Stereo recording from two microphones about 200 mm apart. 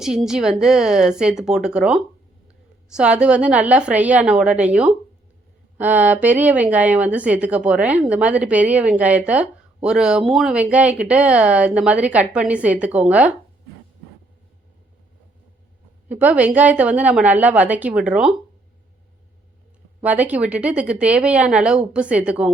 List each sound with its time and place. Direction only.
0.3 s speech: centre (ahead or behind)
16.0 s speech: 5° right (ahead or behind)
20.0 s speech: 5° right (ahead or behind)